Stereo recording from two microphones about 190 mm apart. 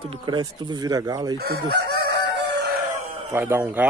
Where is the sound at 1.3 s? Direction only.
55° right (ahead or behind).